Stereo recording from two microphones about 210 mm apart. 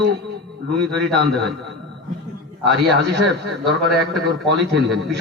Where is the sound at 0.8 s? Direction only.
Centre (ahead or behind).